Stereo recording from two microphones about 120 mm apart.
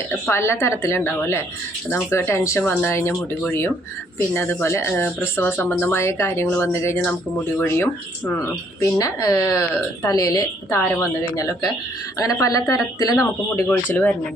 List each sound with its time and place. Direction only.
0.3 s a woman's voice: 20° left (ahead or behind)
4.4 s a woman's voice: 20° left (ahead or behind)
8.8 s a woman's voice: 30° left (ahead or behind)
13.5 s speech: 10° left (ahead or behind)